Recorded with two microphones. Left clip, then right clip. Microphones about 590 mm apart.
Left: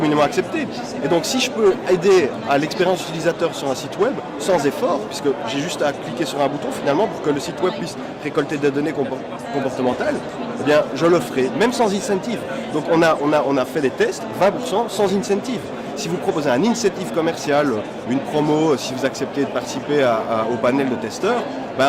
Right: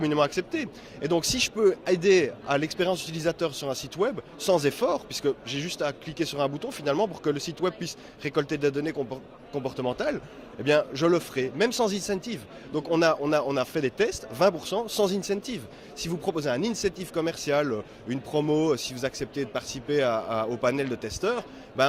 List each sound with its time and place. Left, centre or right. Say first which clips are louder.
0.0 s speech: left 8 dB; right
10.7 s speech: left 7 dB; right